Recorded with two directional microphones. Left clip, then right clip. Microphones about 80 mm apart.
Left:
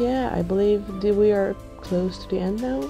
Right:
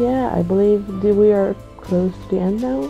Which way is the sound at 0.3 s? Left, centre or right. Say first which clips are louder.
Right 5 dB; left.